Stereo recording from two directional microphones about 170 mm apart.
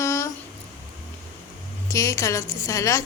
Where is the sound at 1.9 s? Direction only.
20° left (ahead or behind).